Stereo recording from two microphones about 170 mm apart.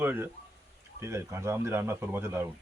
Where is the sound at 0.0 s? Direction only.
10° right (ahead or behind).